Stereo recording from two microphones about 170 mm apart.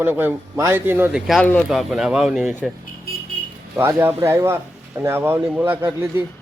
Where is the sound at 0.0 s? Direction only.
10° right (ahead or behind).